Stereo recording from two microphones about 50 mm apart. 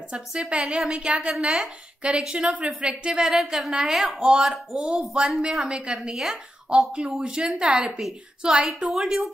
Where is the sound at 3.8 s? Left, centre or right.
Centre.